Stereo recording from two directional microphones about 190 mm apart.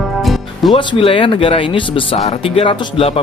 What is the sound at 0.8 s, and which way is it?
Speech, 25° left (ahead or behind).